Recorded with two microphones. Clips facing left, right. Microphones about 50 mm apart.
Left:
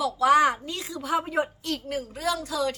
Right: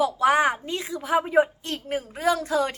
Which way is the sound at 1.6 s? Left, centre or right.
Right.